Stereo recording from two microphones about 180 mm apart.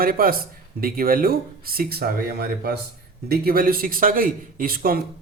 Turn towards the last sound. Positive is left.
turn(degrees=-55)  # may be behind; listen again after turning